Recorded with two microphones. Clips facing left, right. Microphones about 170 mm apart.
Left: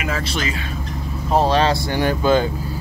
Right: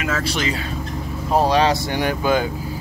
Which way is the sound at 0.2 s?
15° right (ahead or behind).